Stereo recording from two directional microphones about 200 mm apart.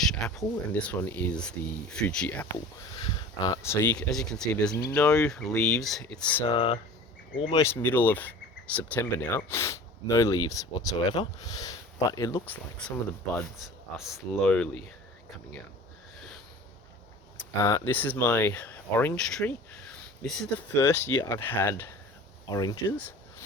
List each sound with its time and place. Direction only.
0.0 s speech: centre (ahead or behind)
3.0 s speech: 20° left (ahead or behind); by 6.0 s centre (ahead or behind)
6.5 s speech: 25° left (ahead or behind)
7.6 s speech: 10° left (ahead or behind)
13.3 s speech: centre (ahead or behind)
17.6 s speech: 15° left (ahead or behind)